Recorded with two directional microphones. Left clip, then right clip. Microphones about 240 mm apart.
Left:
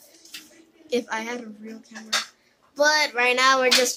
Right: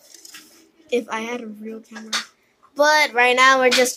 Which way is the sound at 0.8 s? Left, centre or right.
Centre.